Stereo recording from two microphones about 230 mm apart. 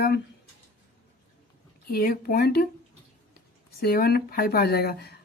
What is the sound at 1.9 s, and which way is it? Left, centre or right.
Speech, left.